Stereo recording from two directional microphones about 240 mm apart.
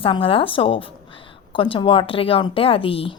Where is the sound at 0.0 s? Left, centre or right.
Left.